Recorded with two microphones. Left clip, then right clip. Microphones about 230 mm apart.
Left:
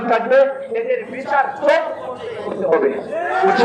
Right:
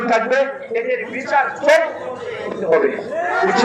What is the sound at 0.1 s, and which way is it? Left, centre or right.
A man's voice, left.